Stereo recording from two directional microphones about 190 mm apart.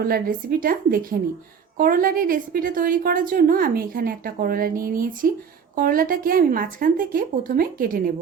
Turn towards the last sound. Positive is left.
turn(degrees=-50)  # may be behind; listen again after turning